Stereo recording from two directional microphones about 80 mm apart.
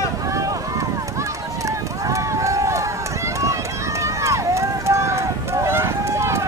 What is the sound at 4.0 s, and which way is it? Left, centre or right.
Run, right.